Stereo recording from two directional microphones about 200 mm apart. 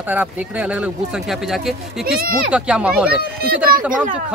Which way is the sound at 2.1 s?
50° right (ahead or behind).